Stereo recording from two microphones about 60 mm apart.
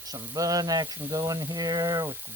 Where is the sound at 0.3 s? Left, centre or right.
Right.